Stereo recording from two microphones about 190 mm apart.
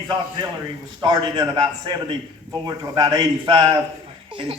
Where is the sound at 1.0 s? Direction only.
25° right (ahead or behind).